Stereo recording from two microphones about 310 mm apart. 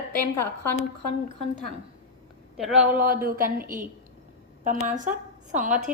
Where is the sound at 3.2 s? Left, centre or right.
Right.